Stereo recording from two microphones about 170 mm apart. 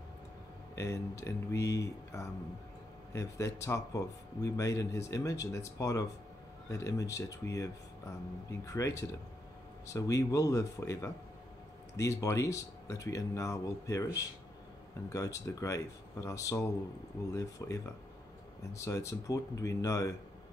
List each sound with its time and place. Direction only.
0.7 s speech: 15° left (ahead or behind)
15.1 s speech: 20° left (ahead or behind)